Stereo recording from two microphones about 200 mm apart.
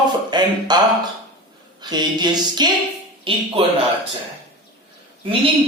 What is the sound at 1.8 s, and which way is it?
Speech, 20° right (ahead or behind).